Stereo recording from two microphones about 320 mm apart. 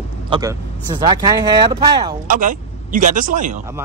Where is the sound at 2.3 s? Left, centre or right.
Right.